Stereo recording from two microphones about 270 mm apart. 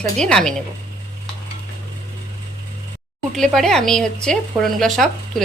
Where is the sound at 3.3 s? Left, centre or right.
Centre.